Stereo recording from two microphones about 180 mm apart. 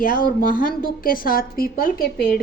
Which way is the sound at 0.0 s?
50° left (ahead or behind).